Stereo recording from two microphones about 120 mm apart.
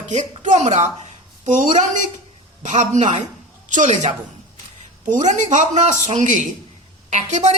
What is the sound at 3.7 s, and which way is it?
A woman's voice, 90° right.